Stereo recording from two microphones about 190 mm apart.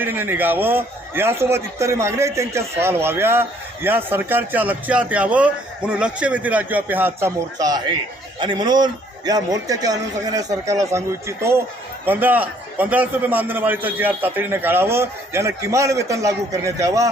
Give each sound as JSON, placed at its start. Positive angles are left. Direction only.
{"t": 0.0, "sound": "a man's voice", "side_deg": -10}